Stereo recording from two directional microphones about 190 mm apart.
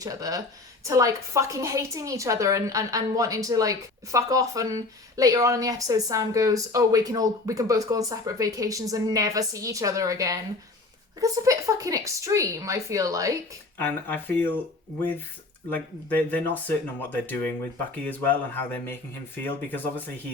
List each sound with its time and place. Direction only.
0.0 s a woman's voice: 20° right (ahead or behind)
13.7 s speech: 10° left (ahead or behind)
15.7 s speech: 10° left (ahead or behind)